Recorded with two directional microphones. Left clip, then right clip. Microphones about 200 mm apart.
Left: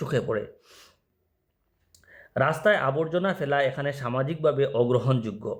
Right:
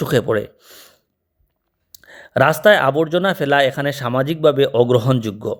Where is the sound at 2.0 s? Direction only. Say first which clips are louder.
Right 10 dB; 35° right (ahead or behind).